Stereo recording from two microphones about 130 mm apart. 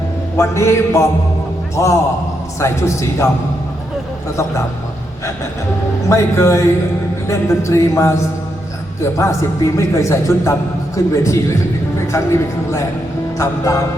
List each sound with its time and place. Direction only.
0.3 s speech: 20° left (ahead or behind)
6.1 s speech: 20° left (ahead or behind)
9.1 s speech: 25° left (ahead or behind)